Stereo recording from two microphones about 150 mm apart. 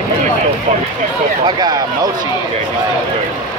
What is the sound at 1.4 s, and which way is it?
Speech, 30° right (ahead or behind).